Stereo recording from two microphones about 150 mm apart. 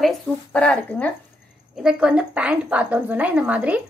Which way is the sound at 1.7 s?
5° right (ahead or behind).